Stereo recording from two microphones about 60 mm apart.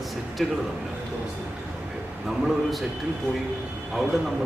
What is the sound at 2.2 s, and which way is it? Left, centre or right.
Speech, centre.